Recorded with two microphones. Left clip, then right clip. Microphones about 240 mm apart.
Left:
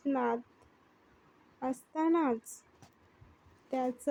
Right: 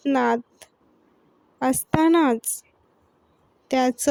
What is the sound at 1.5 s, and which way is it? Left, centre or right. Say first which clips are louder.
Speech: right 13 dB; right.